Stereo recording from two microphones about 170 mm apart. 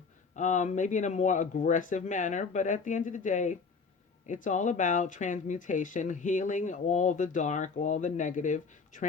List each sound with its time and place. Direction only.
0.3 s speech: 45° left (ahead or behind)